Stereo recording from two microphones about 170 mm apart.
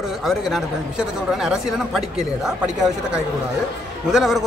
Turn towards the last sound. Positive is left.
turn(degrees=0)  # may be behind; listen again after turning